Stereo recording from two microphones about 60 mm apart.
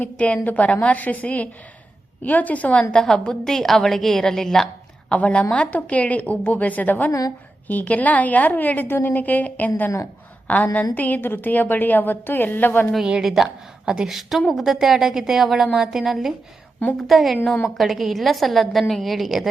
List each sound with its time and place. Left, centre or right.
0.0 s a woman's voice: left
2.9 s a woman's voice: centre
5.0 s a woman's voice: left
7.1 s a woman's voice: left
7.7 s a woman's voice: left
13.2 s a woman's voice: centre